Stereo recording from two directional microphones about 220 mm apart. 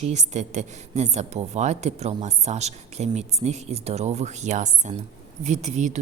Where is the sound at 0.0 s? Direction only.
30° right (ahead or behind).